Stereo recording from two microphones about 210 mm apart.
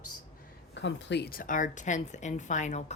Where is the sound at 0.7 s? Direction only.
60° left (ahead or behind).